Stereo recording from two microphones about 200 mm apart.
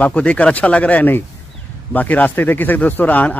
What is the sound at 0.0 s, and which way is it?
Speech, 5° left (ahead or behind).